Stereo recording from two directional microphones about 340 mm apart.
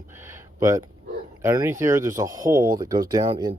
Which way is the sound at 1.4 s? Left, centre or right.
Centre.